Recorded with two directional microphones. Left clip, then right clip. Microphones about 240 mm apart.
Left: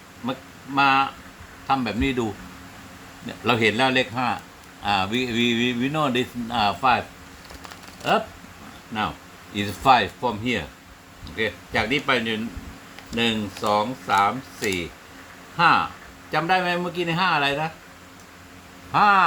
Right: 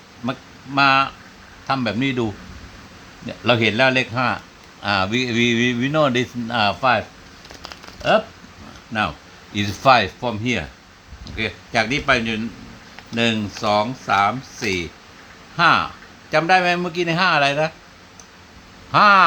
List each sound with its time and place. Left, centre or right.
0.8 s speech: right
3.2 s speech: centre
9.5 s speech: right
15.5 s a sound: right
16.3 s speech: right
18.9 s a sound: right